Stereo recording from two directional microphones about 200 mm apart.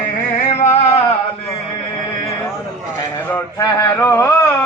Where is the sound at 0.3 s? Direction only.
35° left (ahead or behind).